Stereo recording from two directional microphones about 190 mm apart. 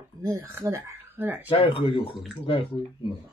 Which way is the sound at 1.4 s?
25° left (ahead or behind).